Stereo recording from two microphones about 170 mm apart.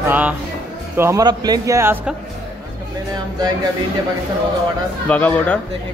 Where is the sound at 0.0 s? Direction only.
10° right (ahead or behind).